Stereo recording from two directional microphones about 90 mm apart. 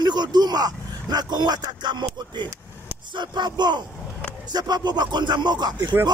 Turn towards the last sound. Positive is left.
turn(degrees=-50)  # may be behind; listen again after turning